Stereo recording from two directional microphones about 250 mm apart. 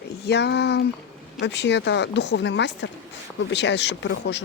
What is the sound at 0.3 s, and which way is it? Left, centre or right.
Speech, left.